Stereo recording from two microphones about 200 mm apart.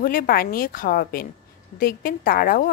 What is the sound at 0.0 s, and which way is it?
A woman's voice, 45° left (ahead or behind).